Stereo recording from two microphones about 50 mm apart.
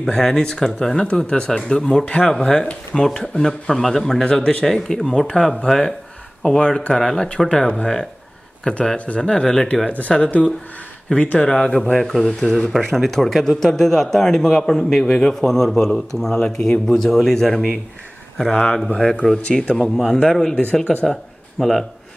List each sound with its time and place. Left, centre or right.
0.0 s speech: centre
2.0 s speech: left
4.4 s speech: left
4.6 s speech: centre
9.8 s speech: left; by 21.8 s centre